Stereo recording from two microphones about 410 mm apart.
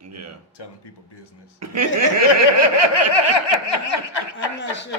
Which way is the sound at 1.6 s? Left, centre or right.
Right.